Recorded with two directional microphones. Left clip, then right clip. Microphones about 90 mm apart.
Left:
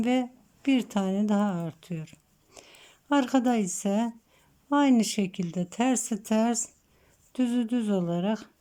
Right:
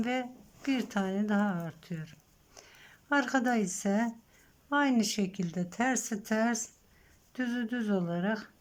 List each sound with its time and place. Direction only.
0.0 s speech: 35° left (ahead or behind)